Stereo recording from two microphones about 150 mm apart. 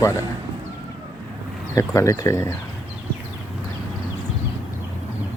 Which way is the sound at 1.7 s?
20° left (ahead or behind).